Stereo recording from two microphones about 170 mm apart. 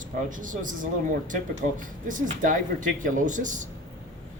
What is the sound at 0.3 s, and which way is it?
Speech, 50° right (ahead or behind).